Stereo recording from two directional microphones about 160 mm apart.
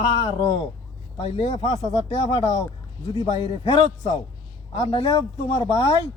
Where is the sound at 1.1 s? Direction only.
30° left (ahead or behind).